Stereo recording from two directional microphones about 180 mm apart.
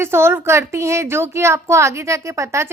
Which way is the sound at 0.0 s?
15° right (ahead or behind).